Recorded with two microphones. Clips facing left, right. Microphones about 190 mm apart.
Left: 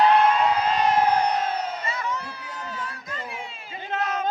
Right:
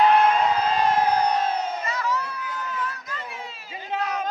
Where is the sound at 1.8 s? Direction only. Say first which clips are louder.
Right 3 dB; 30° left (ahead or behind).